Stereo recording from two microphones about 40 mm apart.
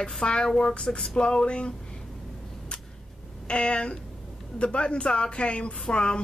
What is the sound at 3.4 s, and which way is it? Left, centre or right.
Speech, left.